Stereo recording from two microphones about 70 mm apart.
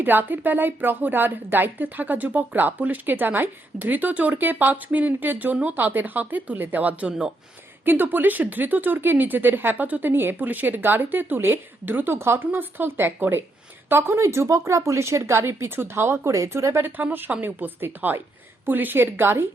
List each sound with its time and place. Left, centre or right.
0.0 s a woman's voice: right
14.2 s speech: right
16.8 s a woman's voice: right